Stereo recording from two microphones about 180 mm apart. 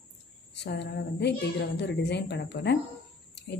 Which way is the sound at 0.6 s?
70° left (ahead or behind).